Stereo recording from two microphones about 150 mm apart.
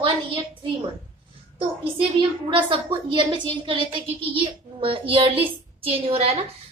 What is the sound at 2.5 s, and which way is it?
A woman's voice, 35° right (ahead or behind).